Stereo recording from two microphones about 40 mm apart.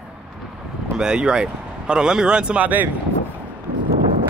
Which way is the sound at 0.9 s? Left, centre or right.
Right.